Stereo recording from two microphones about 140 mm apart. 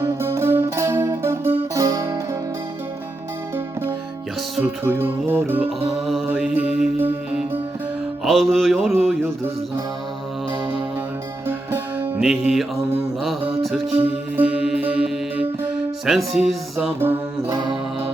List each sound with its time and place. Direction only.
0.0 s music: 15° right (ahead or behind)
4.6 s music: 15° right (ahead or behind)
5.9 s a sound: centre (ahead or behind)
6.2 s music: 5° right (ahead or behind)
8.2 s a sound: centre (ahead or behind)
11.4 s music: 15° right (ahead or behind)
12.2 s a sound: 5° right (ahead or behind)
13.4 s mantra: centre (ahead or behind)
14.0 s music: 10° right (ahead or behind)
17.0 s music: 15° right (ahead or behind)